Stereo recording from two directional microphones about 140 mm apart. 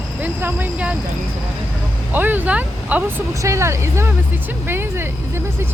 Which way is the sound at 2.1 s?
15° right (ahead or behind).